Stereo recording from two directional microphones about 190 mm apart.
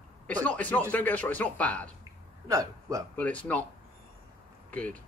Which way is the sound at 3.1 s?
5° left (ahead or behind).